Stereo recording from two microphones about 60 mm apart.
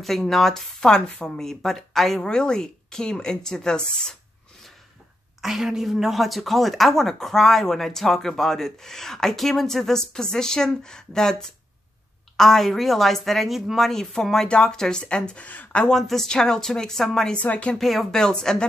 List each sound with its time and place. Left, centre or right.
0.0 s speech: centre
5.4 s speech: centre; by 15.9 s left
15.9 s speech: centre
17.4 s speech: left
17.7 s speech: centre